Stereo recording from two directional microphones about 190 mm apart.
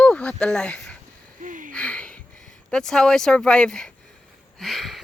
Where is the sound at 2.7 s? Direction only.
5° left (ahead or behind).